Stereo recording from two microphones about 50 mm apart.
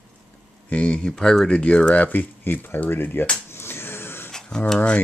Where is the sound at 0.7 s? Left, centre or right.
Left.